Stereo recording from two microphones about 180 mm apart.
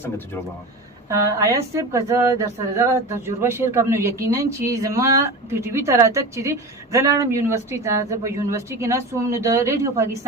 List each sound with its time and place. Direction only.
1.3 s speech: 15° right (ahead or behind)